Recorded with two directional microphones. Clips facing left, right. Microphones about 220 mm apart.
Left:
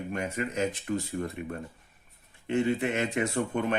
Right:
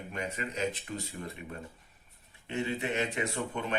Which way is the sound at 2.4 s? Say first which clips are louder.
Left 6 dB; 50° left (ahead or behind).